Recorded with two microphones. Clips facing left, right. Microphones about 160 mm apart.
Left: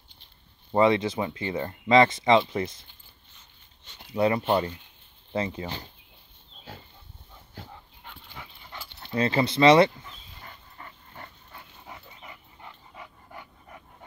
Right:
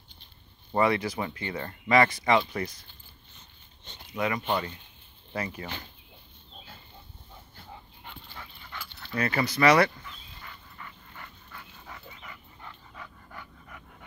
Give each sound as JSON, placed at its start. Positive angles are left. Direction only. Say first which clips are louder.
{"t": 0.7, "sound": "speech", "louder": "left 4 dB", "side_deg": 20}
{"t": 4.1, "sound": "speech", "louder": "left 6 dB", "side_deg": 30}
{"t": 8.3, "sound": "dog", "louder": "even", "side_deg": 20}
{"t": 10.0, "sound": "dog", "louder": "even", "side_deg": 35}
{"t": 11.8, "sound": "dog", "louder": "left 2 dB", "side_deg": 20}